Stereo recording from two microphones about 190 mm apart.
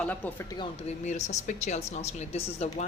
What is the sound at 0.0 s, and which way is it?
Speech, 10° left (ahead or behind).